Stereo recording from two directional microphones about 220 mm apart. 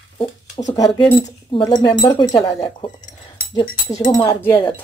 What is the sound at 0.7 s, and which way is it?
Speech, 20° left (ahead or behind).